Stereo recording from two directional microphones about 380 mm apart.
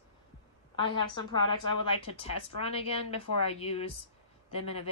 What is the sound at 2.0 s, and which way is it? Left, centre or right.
Speech, centre.